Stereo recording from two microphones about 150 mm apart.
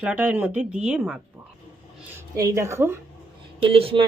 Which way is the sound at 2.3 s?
20° right (ahead or behind).